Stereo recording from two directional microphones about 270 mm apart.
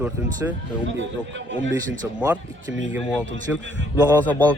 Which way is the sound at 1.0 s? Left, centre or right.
Right.